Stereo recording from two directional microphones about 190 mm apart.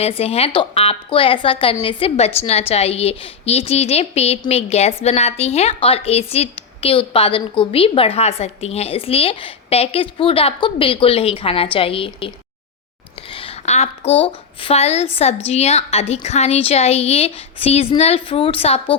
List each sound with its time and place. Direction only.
0.0 s a woman's voice: 30° left (ahead or behind)
13.3 s speech: 30° left (ahead or behind)